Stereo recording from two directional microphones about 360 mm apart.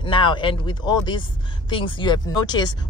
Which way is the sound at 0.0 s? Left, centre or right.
Centre.